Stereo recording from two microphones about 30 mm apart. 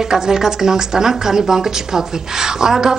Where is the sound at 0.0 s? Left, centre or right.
Centre.